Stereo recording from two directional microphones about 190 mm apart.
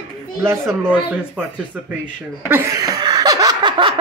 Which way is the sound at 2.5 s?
15° right (ahead or behind).